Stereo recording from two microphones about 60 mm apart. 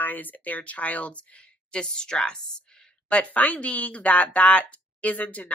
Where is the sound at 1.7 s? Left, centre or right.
Centre.